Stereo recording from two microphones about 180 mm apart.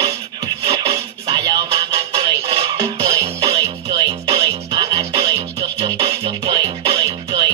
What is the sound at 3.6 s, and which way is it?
Music, 20° right (ahead or behind).